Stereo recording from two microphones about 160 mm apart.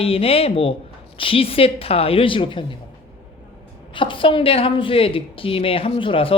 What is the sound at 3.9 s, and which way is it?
A woman's voice, 30° left (ahead or behind).